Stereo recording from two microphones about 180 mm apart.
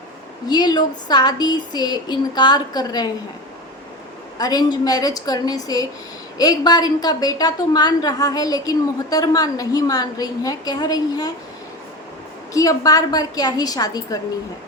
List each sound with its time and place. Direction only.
0.4 s a woman's voice: 20° left (ahead or behind)
4.4 s a woman's voice: 20° left (ahead or behind)
12.5 s a woman's voice: 20° left (ahead or behind)